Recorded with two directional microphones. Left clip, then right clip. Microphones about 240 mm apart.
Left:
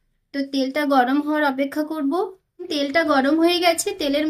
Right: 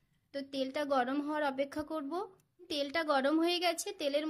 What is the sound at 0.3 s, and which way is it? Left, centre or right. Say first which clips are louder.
A woman's voice: left 13 dB; right.